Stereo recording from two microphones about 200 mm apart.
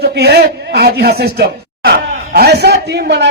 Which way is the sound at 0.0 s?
55° right (ahead or behind).